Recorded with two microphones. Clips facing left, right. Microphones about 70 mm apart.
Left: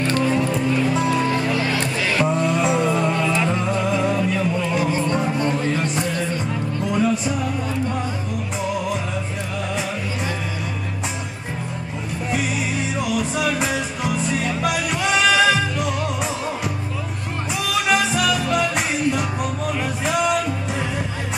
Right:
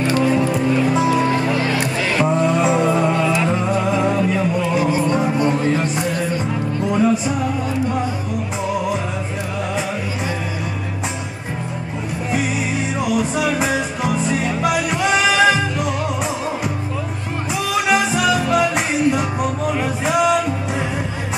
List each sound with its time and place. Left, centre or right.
0.0 s music: centre
1.4 s music: right
12.9 s music: centre
17.6 s music: centre